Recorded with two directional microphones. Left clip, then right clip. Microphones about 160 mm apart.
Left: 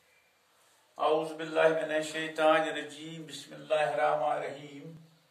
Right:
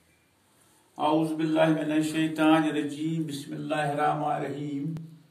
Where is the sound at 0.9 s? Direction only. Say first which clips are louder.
Right 3 dB; 15° left (ahead or behind).